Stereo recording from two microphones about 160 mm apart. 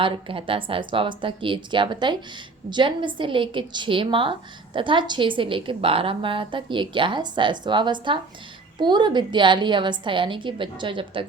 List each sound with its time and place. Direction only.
0.0 s a woman's voice: 35° right (ahead or behind)